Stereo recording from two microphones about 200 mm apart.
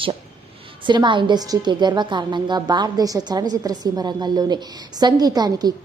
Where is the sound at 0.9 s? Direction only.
25° right (ahead or behind).